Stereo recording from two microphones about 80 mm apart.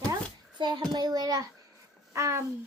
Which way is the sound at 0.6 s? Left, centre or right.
Right.